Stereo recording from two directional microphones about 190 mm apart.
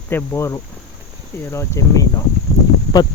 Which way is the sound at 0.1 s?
10° left (ahead or behind).